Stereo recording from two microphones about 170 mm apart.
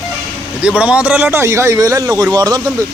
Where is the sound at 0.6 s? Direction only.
5° right (ahead or behind); by 2.8 s 20° right (ahead or behind).